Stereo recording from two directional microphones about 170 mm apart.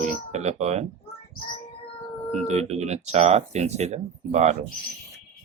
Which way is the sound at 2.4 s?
40° right (ahead or behind).